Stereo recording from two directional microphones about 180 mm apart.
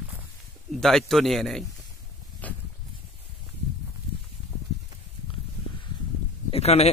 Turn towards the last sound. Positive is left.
turn(degrees=35)  # may be behind; listen again after turning